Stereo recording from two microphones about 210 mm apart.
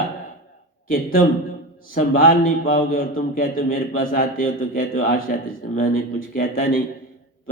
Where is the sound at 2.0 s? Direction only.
45° left (ahead or behind).